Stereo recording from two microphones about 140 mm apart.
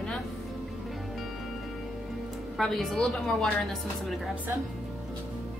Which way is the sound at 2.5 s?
Centre (ahead or behind).